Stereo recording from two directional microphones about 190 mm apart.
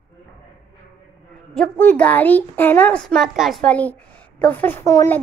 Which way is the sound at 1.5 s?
5° left (ahead or behind).